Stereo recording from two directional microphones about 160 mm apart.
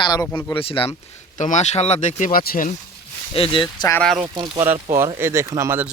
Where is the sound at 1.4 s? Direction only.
50° left (ahead or behind); by 2.6 s 65° left (ahead or behind).